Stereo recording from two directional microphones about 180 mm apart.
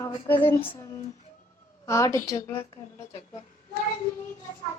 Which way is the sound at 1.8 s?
15° left (ahead or behind).